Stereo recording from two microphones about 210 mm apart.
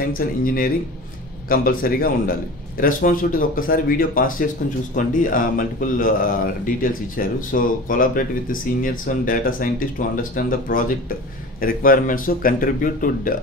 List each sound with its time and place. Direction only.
0.2 s speech: 40° left (ahead or behind)
1.5 s speech: 45° left (ahead or behind)